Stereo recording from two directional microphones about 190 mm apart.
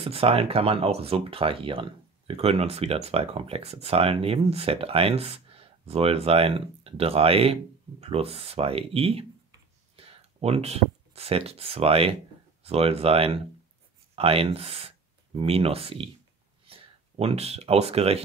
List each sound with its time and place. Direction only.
0.0 s speech: 30° right (ahead or behind)